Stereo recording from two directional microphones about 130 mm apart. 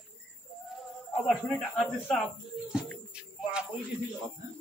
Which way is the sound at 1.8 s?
10° left (ahead or behind).